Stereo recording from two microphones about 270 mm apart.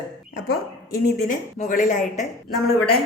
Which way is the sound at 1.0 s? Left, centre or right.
Left.